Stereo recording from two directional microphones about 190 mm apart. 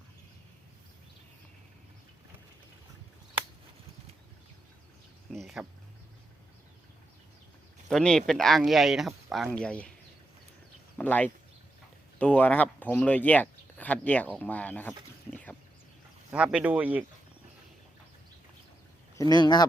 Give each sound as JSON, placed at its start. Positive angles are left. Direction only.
{"t": 5.3, "sound": "a sound", "side_deg": 0}
{"t": 7.9, "sound": "speech", "side_deg": 5}
{"t": 10.9, "sound": "speech", "side_deg": 10}
{"t": 16.3, "sound": "speech", "side_deg": -5}
{"t": 19.1, "sound": "speech", "side_deg": 20}